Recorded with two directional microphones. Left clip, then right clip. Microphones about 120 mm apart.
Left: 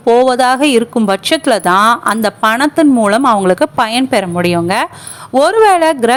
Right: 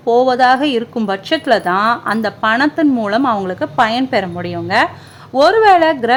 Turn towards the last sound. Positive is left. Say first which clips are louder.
# left 1 dB
turn(degrees=35)  # may be behind; listen again after turning